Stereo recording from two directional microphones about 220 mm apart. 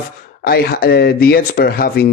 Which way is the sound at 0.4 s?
45° left (ahead or behind).